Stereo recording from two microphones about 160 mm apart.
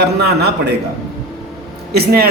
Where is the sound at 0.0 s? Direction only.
90° right.